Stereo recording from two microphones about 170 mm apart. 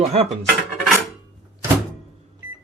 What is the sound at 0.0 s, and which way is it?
Speech, 40° right (ahead or behind).